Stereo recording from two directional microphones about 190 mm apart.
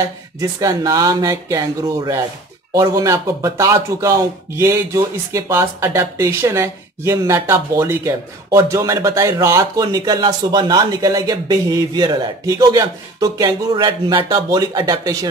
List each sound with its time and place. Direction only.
0.4 s speech: 15° right (ahead or behind)